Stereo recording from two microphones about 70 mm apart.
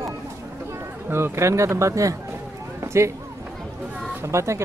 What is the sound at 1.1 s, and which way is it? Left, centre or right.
Speech, right.